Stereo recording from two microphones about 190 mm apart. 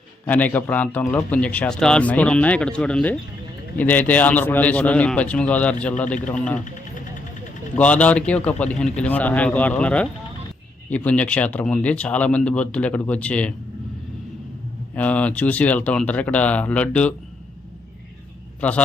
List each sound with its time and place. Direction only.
0.3 s speech: 10° left (ahead or behind)
7.8 s speech: 5° left (ahead or behind)
14.9 s speech: 10° left (ahead or behind)
18.6 s speech: 5° left (ahead or behind)